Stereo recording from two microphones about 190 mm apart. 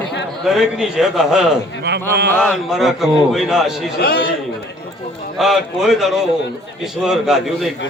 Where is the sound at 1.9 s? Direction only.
60° right (ahead or behind).